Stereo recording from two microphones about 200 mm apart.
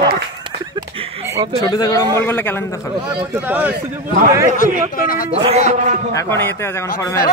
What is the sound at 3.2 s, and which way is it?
Speech, 10° right (ahead or behind).